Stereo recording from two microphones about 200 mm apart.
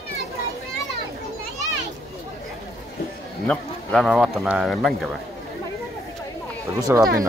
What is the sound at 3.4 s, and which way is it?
Speech, 5° left (ahead or behind).